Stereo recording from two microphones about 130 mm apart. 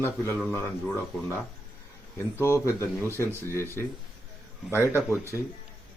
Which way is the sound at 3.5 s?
20° left (ahead or behind).